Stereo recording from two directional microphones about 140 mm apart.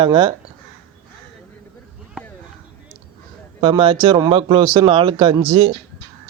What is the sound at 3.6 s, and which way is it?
Speech, 40° right (ahead or behind).